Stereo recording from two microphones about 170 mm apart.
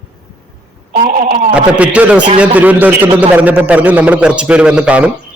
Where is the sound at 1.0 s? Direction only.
50° right (ahead or behind).